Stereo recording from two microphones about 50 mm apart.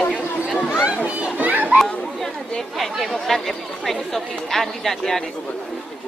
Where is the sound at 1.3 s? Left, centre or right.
Right.